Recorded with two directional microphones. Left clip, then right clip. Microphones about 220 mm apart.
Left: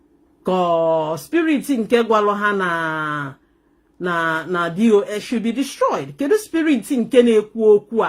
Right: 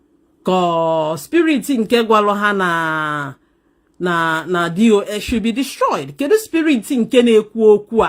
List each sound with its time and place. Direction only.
0.4 s speech: 45° right (ahead or behind)